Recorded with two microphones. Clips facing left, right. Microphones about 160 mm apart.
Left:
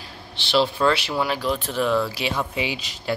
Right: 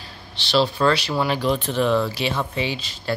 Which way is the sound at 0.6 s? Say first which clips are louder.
Right 1 dB; 10° left (ahead or behind).